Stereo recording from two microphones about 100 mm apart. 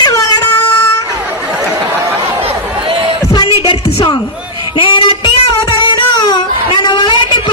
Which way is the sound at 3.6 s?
55° left (ahead or behind).